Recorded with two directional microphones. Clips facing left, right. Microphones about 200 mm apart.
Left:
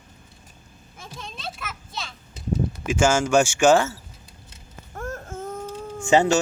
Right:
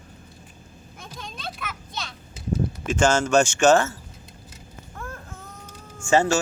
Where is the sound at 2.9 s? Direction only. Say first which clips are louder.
Even; 10° left (ahead or behind).